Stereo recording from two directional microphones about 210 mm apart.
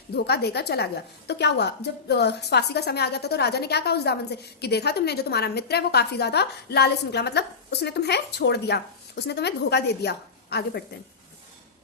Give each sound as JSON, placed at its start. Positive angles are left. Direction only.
{"t": 0.1, "sound": "a woman's voice", "side_deg": 50}